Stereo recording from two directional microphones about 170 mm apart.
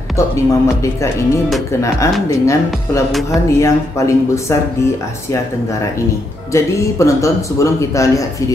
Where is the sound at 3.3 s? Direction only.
15° left (ahead or behind).